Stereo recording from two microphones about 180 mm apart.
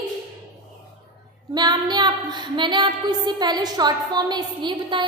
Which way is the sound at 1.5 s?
20° right (ahead or behind).